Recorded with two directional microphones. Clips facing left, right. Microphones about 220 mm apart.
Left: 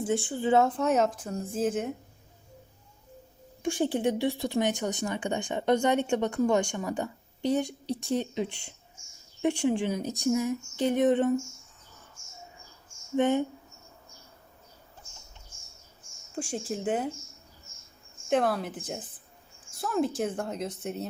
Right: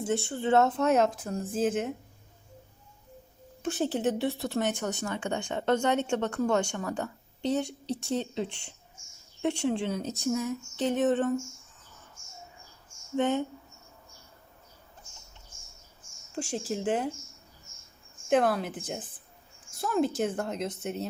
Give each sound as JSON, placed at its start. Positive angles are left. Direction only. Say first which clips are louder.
{"t": 0.3, "sound": "a woman's voice", "louder": "even", "side_deg": 10}
{"t": 0.7, "sound": "a woman's voice", "louder": "right 1 dB", "side_deg": -5}
{"t": 1.3, "sound": "a woman's voice", "louder": "right 1 dB", "side_deg": 5}
{"t": 1.6, "sound": "a woman's voice", "louder": "even", "side_deg": -5}
{"t": 3.6, "sound": "a woman's voice", "louder": "left 1 dB", "side_deg": 10}
{"t": 13.1, "sound": "a woman's voice", "louder": "left 2 dB", "side_deg": 15}
{"t": 16.4, "sound": "speech", "louder": "even", "side_deg": -5}
{"t": 16.7, "sound": "a woman's voice", "louder": "even", "side_deg": 5}
{"t": 18.3, "sound": "a woman's voice", "louder": "right 1 dB", "side_deg": 0}